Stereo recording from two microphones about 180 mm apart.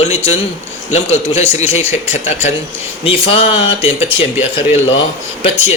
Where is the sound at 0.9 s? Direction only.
40° left (ahead or behind).